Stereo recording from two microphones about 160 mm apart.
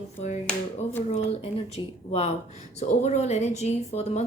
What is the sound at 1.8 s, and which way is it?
Speech, 30° left (ahead or behind).